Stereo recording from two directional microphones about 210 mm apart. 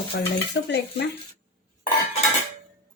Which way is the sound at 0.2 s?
55° left (ahead or behind).